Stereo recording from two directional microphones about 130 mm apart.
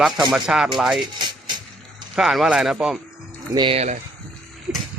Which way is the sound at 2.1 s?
Centre (ahead or behind).